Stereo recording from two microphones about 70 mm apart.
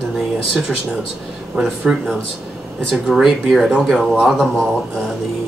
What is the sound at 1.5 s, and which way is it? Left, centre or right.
Speech, centre.